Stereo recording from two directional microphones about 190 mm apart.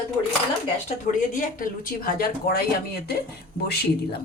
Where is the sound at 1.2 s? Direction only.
45° left (ahead or behind).